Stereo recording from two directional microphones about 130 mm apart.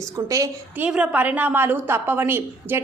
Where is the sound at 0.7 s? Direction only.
10° right (ahead or behind).